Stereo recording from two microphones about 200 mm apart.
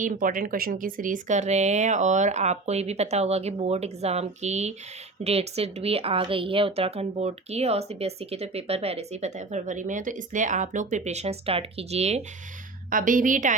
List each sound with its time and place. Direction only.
0.0 s a woman's voice: 45° right (ahead or behind)
12.9 s a woman's voice: 45° right (ahead or behind)